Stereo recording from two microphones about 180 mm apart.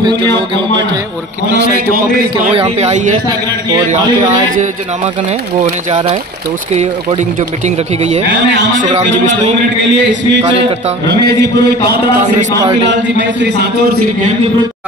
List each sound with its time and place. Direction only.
0.0 s speech: 25° right (ahead or behind)
2.5 s speech: 35° right (ahead or behind)
5.6 s speech: 35° right (ahead or behind)
11.1 s a man's voice: 70° right (ahead or behind)
12.8 s a man's voice: 85° right